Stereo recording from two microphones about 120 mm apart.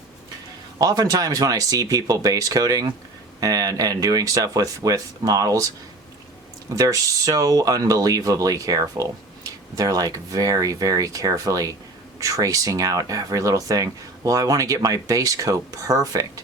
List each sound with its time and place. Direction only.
0.8 s speech: 30° right (ahead or behind)
6.7 s speech: 30° right (ahead or behind)